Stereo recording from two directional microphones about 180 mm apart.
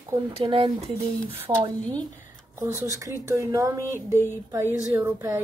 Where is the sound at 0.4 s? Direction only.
30° right (ahead or behind).